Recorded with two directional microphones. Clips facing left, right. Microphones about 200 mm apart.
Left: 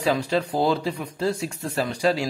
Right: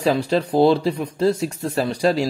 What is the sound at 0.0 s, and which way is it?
Speech, 35° right (ahead or behind).